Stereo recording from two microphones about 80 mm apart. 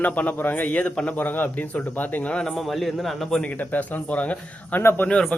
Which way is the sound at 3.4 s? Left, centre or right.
Left.